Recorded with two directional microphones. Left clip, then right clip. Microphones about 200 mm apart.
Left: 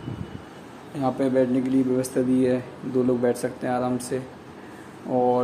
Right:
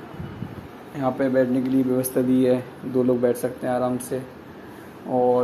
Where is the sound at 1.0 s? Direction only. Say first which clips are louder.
Right 1 dB; 5° left (ahead or behind).